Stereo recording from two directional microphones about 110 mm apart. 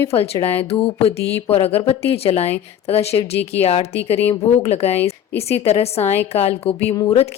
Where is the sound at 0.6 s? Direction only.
60° left (ahead or behind).